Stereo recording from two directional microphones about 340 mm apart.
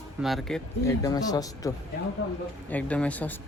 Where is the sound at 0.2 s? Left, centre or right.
Centre.